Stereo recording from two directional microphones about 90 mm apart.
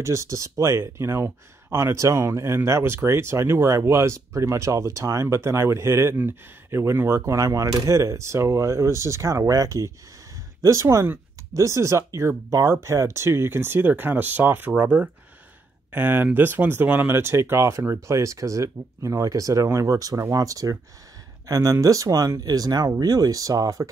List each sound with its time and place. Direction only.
0.0 s speech: 35° right (ahead or behind)